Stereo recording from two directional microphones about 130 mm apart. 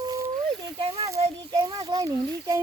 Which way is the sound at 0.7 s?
45° right (ahead or behind).